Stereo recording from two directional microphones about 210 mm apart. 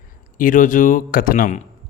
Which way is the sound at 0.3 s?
40° left (ahead or behind).